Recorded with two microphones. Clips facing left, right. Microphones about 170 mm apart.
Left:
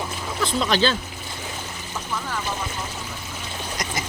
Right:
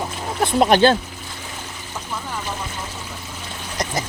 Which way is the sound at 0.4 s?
55° right (ahead or behind).